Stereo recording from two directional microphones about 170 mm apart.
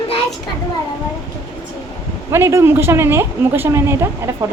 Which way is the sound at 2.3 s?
15° right (ahead or behind).